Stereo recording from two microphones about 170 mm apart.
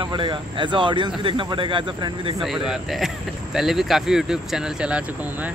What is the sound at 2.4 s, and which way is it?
Speech, 5° right (ahead or behind).